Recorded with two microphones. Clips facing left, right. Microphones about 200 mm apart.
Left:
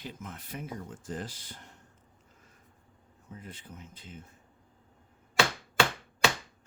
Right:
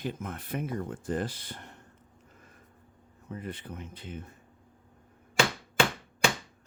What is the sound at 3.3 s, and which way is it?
Speech, 65° right (ahead or behind).